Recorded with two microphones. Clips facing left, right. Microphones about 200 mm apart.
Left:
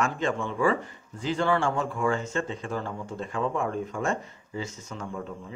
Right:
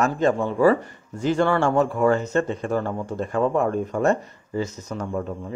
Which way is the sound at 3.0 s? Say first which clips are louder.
Right 7 dB; 45° right (ahead or behind).